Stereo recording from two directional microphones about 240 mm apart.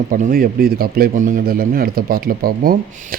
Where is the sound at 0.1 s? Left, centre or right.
Right.